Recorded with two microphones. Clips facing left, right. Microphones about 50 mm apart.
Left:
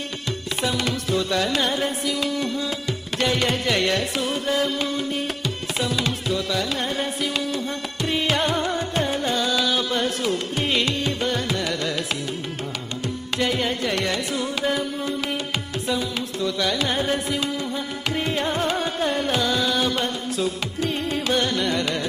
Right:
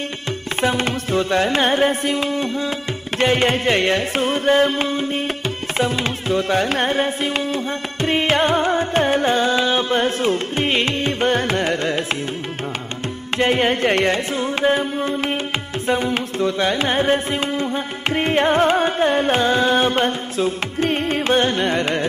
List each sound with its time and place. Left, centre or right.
0.6 s music: right
13.4 s music: right